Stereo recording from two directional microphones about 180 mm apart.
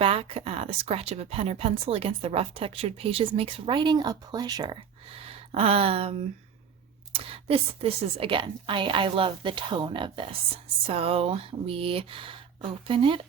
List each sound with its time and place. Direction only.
0.0 s a woman's voice: 35° right (ahead or behind)